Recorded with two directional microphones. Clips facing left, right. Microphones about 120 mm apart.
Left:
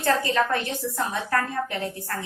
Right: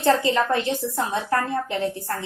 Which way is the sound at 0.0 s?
20° right (ahead or behind).